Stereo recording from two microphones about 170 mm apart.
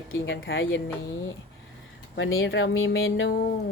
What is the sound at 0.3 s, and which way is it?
Speech, 90° left.